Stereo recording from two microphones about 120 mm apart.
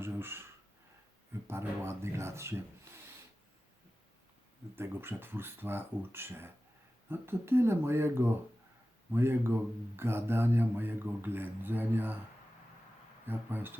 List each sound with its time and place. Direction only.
0.0 s a sound: 20° right (ahead or behind)
1.5 s speech: 20° right (ahead or behind)
4.8 s speech: 20° right (ahead or behind)
13.2 s speech: 15° right (ahead or behind)